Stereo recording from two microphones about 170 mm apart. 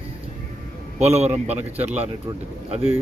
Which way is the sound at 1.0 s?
40° right (ahead or behind).